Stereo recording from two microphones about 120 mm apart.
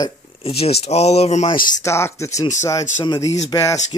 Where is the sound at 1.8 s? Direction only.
20° left (ahead or behind).